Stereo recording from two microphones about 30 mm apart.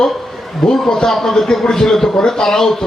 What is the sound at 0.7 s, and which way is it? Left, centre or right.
A man's voice, left.